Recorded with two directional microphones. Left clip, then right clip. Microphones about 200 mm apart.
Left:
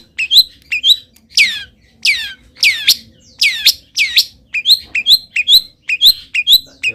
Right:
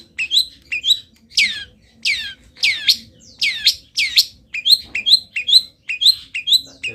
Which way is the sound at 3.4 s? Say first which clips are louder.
Left 5 dB; 25° left (ahead or behind).